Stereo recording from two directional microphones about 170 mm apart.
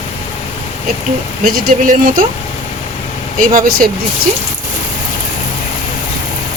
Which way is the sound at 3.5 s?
55° right (ahead or behind).